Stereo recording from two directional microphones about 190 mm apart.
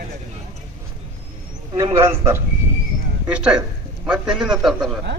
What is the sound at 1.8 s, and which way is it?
A man's voice, 15° right (ahead or behind).